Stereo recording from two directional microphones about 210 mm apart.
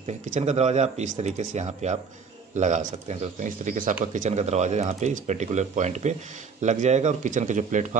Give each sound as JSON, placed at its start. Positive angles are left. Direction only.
{"t": 0.0, "sound": "speech", "side_deg": -35}